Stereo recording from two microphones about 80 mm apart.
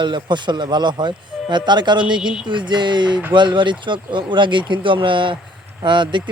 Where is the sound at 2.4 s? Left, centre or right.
Right.